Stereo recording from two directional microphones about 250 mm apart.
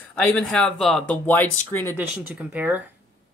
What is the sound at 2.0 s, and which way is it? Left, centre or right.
Speech, centre.